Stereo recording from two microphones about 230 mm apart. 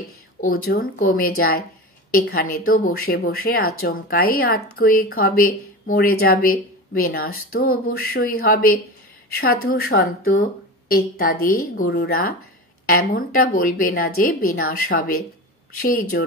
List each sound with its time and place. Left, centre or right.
0.4 s a woman's voice: left